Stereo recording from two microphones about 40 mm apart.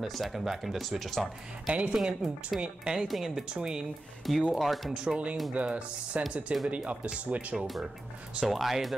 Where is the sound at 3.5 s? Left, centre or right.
Right.